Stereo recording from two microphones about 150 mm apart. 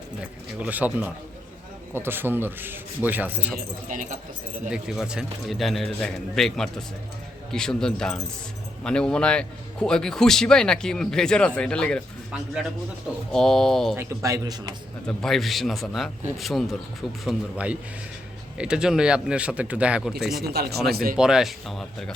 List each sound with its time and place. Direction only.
0.2 s a man's voice: 10° right (ahead or behind)
3.8 s speech: 60° right (ahead or behind)
4.7 s a man's voice: 5° right (ahead or behind)
13.3 s a man's voice: 5° left (ahead or behind)
13.9 s speech: 20° right (ahead or behind)
15.0 s a man's voice: 5° left (ahead or behind)
20.4 s speech: 90° right
20.9 s speech: 75° right (ahead or behind)
21.2 s a man's voice: 5° right (ahead or behind)